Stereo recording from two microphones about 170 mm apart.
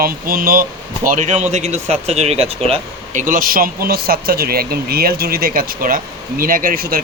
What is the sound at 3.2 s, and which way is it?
Speech, 55° right (ahead or behind).